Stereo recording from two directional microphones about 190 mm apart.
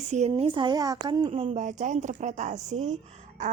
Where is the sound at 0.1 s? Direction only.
35° right (ahead or behind).